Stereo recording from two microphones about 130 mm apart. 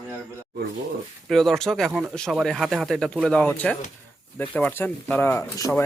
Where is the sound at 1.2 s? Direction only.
Centre (ahead or behind).